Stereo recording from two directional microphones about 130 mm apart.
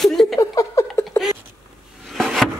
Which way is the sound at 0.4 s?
25° left (ahead or behind).